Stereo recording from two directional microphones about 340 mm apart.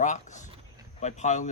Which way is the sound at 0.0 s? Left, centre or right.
Left.